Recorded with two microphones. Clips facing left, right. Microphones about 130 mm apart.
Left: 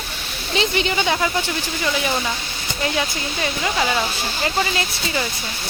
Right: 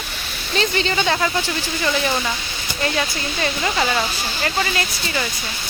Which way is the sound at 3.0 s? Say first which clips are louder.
Right 1 dB; 10° left (ahead or behind).